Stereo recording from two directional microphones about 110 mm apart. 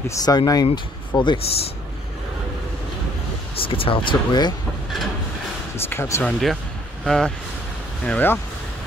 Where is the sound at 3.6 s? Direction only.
55° left (ahead or behind).